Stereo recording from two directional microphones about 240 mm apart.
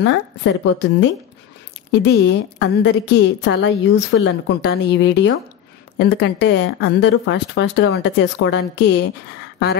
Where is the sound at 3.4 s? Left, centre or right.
Left.